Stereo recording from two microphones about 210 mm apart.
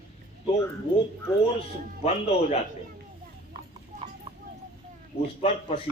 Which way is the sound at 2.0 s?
30° left (ahead or behind).